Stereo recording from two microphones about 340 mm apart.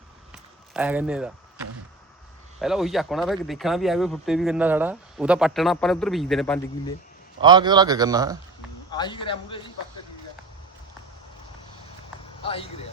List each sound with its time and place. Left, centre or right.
0.7 s speech: centre
2.6 s speech: centre
7.4 s a man's voice: centre
8.9 s speech: centre
12.4 s speech: centre